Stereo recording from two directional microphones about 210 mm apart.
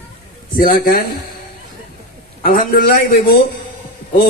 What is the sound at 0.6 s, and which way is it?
Speech, 40° left (ahead or behind).